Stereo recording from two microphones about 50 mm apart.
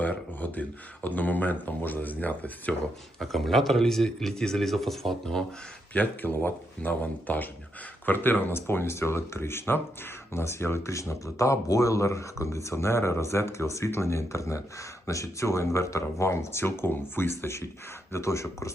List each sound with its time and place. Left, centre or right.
0.0 s speech: left
3.2 s speech: centre
5.9 s speech: left
10.3 s speech: left
18.1 s speech: left